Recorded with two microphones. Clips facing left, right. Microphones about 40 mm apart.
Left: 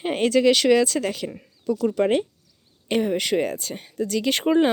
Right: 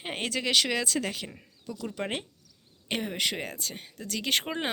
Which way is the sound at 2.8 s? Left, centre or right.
Centre.